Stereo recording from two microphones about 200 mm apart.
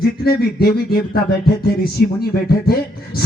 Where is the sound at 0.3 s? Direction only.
50° left (ahead or behind).